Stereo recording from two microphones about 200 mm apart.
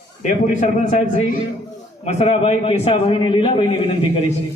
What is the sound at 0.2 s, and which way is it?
Speech, 35° left (ahead or behind).